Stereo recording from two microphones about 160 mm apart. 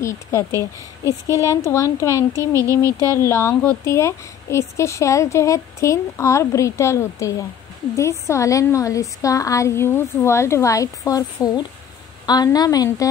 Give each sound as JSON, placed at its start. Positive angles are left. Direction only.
{"t": 0.0, "sound": "a woman's voice", "side_deg": 20}
{"t": 0.5, "sound": "a woman's voice", "side_deg": -20}
{"t": 1.2, "sound": "a woman's voice", "side_deg": 20}
{"t": 2.7, "sound": "a woman's voice", "side_deg": -20}
{"t": 3.1, "sound": "a woman's voice", "side_deg": 15}